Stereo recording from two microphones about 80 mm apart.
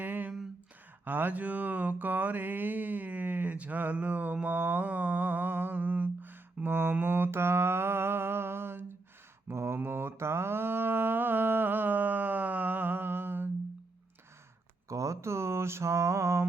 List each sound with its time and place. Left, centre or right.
0.0 s a sound: right
9.5 s mantra: right
14.8 s mantra: right